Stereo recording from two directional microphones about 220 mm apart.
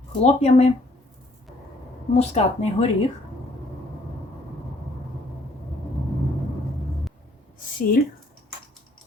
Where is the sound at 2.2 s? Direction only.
30° left (ahead or behind).